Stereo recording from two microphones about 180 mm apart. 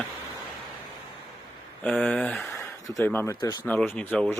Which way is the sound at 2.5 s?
15° left (ahead or behind).